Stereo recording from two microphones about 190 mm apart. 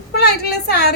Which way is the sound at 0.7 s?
55° left (ahead or behind).